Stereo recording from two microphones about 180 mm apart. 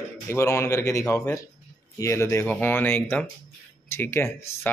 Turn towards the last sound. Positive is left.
turn(degrees=10)  # may be behind; listen again after turning